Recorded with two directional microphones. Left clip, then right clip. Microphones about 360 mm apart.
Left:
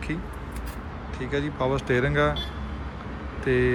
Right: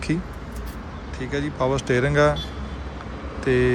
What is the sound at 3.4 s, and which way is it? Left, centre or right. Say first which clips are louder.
Speech: right 3 dB; centre.